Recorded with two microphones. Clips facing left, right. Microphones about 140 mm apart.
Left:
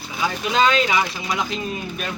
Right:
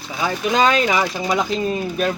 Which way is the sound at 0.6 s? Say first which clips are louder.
Right 1 dB; 40° right (ahead or behind).